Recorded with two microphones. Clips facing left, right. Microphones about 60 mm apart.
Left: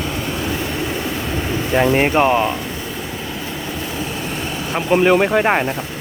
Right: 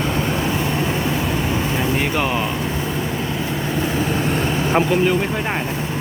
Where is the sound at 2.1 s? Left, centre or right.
Left.